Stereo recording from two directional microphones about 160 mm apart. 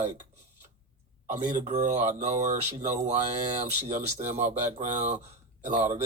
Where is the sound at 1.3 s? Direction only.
50° right (ahead or behind).